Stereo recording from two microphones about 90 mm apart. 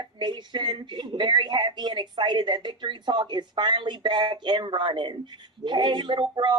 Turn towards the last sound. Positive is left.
turn(degrees=-60)  # may be behind; listen again after turning